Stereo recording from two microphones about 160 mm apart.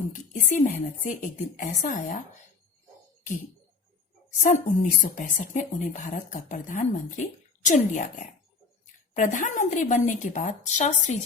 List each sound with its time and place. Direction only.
0.1 s a woman's voice: 55° left (ahead or behind)
4.3 s a woman's voice: 50° left (ahead or behind)